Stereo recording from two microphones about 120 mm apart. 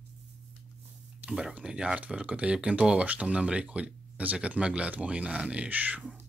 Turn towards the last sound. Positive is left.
turn(degrees=-10)  # may be behind; listen again after turning